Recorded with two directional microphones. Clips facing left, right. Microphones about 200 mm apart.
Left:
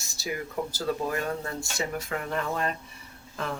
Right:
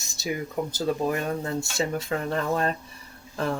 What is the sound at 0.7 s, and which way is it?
Speech, 20° right (ahead or behind).